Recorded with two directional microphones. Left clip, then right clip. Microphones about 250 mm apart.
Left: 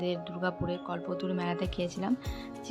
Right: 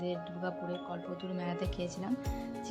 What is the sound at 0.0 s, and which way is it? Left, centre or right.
Speech, centre.